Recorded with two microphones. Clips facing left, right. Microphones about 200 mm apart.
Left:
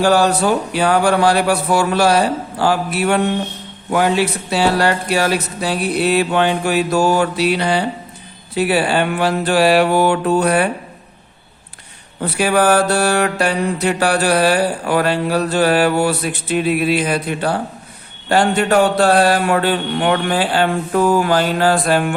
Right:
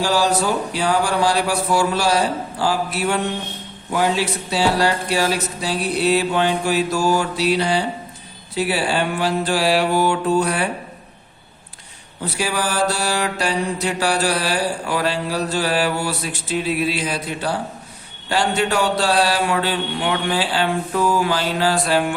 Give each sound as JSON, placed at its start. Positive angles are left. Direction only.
{"t": 0.0, "sound": "mantra", "side_deg": 60}
{"t": 12.2, "sound": "mantra", "side_deg": 60}